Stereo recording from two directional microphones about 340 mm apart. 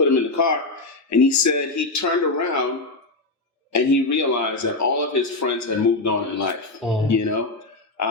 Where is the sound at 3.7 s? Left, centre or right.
Left.